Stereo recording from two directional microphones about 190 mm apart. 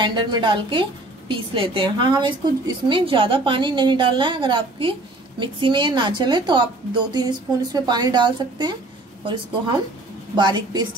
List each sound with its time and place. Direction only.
0.0 s a woman's voice: 25° right (ahead or behind)